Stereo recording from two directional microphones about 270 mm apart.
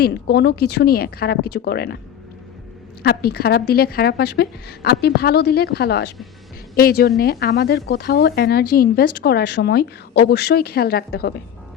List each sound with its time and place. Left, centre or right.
0.0 s speech: left
3.0 s speech: left